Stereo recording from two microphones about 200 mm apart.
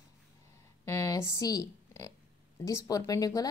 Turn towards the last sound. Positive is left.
turn(degrees=20)  # may be behind; listen again after turning